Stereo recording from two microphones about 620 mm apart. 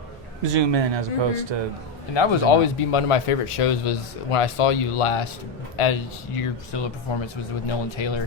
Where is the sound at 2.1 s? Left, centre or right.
Left.